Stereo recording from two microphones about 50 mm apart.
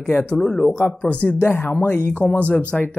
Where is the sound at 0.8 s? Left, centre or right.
Left.